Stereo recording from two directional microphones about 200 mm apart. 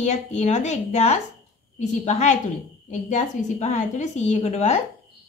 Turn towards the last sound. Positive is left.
turn(degrees=35)  # may be behind; listen again after turning